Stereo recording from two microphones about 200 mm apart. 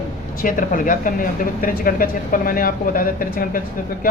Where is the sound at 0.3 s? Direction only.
45° left (ahead or behind).